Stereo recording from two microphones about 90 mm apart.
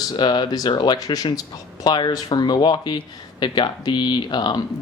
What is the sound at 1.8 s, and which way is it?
Speech, 55° left (ahead or behind).